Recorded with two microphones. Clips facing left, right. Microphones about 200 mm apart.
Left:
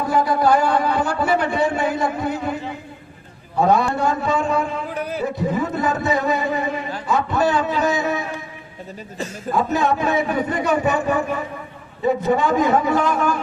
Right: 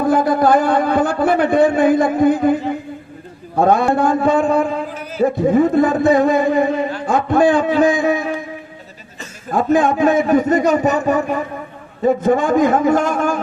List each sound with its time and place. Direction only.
0.1 s a man's voice: 50° right (ahead or behind)
3.6 s a man's voice: 50° right (ahead or behind)
9.6 s a man's voice: 50° right (ahead or behind)